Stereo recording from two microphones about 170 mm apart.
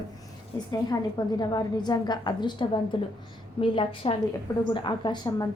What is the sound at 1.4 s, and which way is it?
A woman's voice, 25° left (ahead or behind).